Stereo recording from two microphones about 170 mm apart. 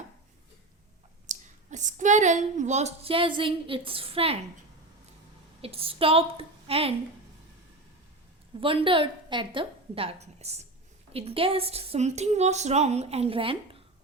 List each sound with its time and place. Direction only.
1.3 s speech: 45° right (ahead or behind)
5.6 s a woman's voice: 35° right (ahead or behind)
8.6 s a woman's voice: 30° right (ahead or behind)